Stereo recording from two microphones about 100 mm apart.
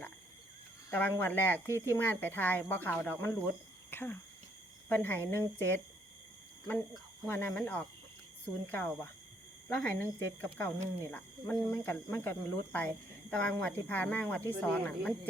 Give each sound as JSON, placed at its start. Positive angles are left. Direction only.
{"t": 0.9, "sound": "speech", "side_deg": 20}
{"t": 7.3, "sound": "speech", "side_deg": 20}